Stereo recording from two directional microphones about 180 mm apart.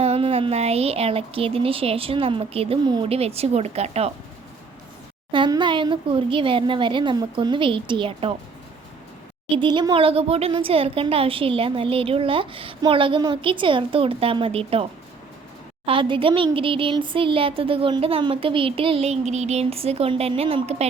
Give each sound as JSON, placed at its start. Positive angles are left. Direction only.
{"t": 0.0, "sound": "speech", "side_deg": -35}
{"t": 5.3, "sound": "a woman's voice", "side_deg": -25}
{"t": 9.6, "sound": "a woman's voice", "side_deg": -25}
{"t": 15.9, "sound": "speech", "side_deg": -30}